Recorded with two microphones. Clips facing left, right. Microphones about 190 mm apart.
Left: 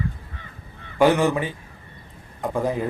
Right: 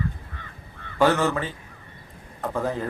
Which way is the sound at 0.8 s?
15° left (ahead or behind).